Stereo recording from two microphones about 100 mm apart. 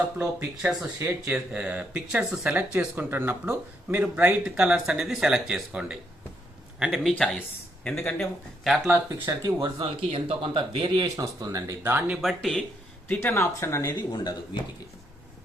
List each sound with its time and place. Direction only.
0.6 s speech: 10° right (ahead or behind)
0.9 s speech: 30° right (ahead or behind)
1.3 s speech: 15° right (ahead or behind); by 8.8 s centre (ahead or behind)
8.8 s speech: 30° right (ahead or behind)
9.6 s speech: 60° right (ahead or behind)
11.3 s speech: 35° right (ahead or behind)
11.8 s speech: 20° right (ahead or behind)
12.1 s speech: centre (ahead or behind)
13.1 s speech: 25° left (ahead or behind)
14.1 s speech: 40° left (ahead or behind)